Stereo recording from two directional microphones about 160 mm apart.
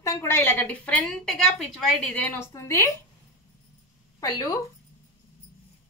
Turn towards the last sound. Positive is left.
turn(degrees=20)  # may be behind; listen again after turning